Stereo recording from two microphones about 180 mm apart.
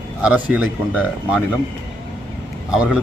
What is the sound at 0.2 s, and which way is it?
Speech, 5° right (ahead or behind).